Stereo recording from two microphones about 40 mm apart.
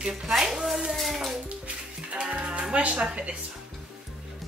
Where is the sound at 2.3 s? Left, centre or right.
Right.